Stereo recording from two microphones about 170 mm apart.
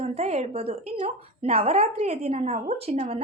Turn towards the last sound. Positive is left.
turn(degrees=-40)  # may be behind; listen again after turning